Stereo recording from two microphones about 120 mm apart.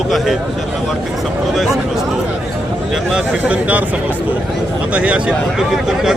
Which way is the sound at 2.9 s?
5° right (ahead or behind).